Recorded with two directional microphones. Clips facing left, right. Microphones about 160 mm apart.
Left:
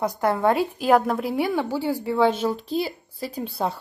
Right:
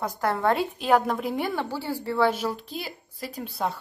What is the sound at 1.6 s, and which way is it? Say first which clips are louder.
Speech: left 5 dB; 15° left (ahead or behind).